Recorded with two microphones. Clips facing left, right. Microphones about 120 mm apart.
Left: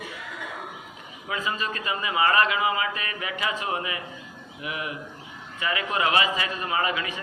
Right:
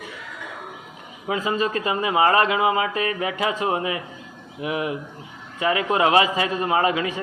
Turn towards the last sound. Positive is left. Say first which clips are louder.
# right 6 dB
turn(degrees=-30)  # may be behind; listen again after turning